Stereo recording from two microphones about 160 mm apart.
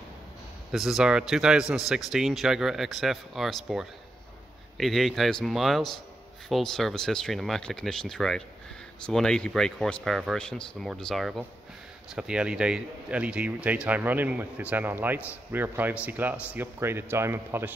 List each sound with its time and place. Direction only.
0.7 s speech: centre (ahead or behind)